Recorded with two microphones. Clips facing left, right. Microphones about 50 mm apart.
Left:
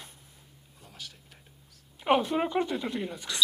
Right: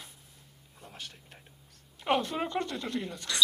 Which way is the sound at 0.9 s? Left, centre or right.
Right.